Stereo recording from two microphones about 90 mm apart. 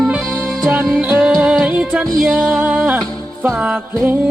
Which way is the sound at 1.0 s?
15° right (ahead or behind).